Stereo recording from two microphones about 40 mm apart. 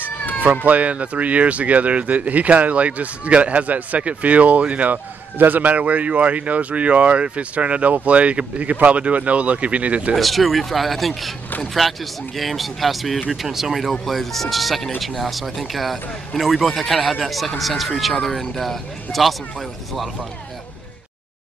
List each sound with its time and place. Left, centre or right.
0.7 s speech: right
10.1 s a man's voice: centre